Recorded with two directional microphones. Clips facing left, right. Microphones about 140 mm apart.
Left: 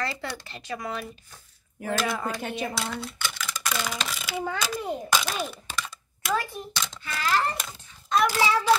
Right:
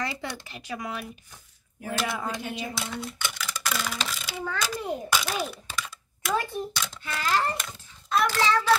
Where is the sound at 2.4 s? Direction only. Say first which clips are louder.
Left 3 dB; 60° left (ahead or behind).